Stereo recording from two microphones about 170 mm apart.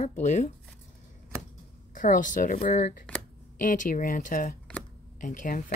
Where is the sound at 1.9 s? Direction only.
50° left (ahead or behind).